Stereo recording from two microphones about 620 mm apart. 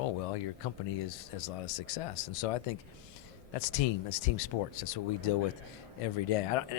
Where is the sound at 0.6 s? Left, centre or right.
Left.